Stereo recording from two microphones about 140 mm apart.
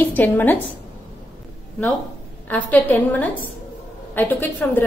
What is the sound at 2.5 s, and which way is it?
A woman's voice, 10° left (ahead or behind).